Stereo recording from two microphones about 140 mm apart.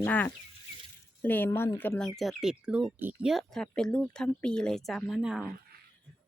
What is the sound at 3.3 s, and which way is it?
Speech, centre (ahead or behind).